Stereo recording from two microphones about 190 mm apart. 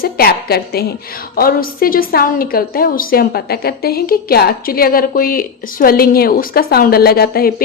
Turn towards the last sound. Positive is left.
turn(degrees=55)  # may be behind; listen again after turning